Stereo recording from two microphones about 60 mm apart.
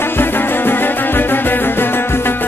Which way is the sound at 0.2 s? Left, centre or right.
Left.